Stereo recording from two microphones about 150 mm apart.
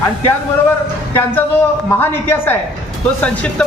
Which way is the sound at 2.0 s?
15° left (ahead or behind).